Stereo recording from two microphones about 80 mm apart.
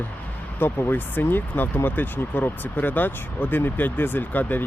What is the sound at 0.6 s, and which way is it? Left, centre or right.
Speech, left.